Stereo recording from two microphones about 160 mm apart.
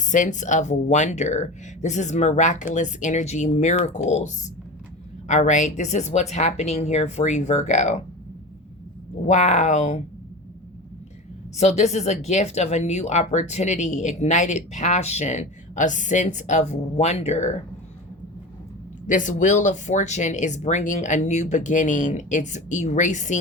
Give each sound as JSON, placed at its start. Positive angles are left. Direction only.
{"t": 0.1, "sound": "speech", "side_deg": 50}
{"t": 9.2, "sound": "speech", "side_deg": 45}
{"t": 11.5, "sound": "speech", "side_deg": 45}
{"t": 19.0, "sound": "speech", "side_deg": 50}